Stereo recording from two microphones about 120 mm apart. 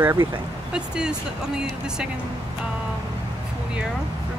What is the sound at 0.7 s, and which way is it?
Speech, 5° right (ahead or behind).